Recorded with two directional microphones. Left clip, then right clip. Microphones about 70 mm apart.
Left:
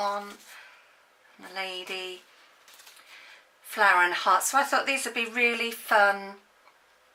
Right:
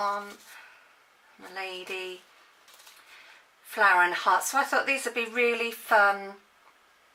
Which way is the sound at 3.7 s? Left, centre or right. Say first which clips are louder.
Even; left.